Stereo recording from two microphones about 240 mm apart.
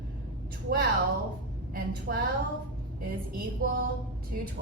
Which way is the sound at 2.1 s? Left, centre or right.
Right.